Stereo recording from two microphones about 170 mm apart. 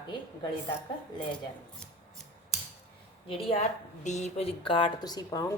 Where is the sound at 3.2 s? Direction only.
40° left (ahead or behind).